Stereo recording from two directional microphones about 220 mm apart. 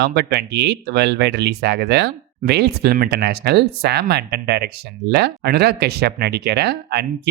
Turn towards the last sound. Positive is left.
turn(degrees=-50)  # may be behind; listen again after turning